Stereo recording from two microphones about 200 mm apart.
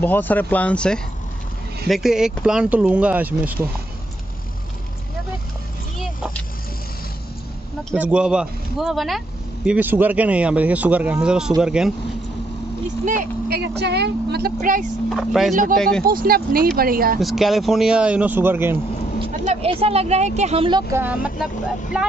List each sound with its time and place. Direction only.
0.0 s speech: 10° left (ahead or behind); by 3.5 s 10° right (ahead or behind)
7.9 s a man's voice: 5° right (ahead or behind)
13.0 s speech: 45° right (ahead or behind)
14.6 s speech: 40° right (ahead or behind)
15.0 s speech: centre (ahead or behind)
16.1 s speech: 45° right (ahead or behind)
17.2 s speech: centre (ahead or behind)
19.4 s speech: 30° right (ahead or behind)
20.9 s a man's voice: 10° right (ahead or behind)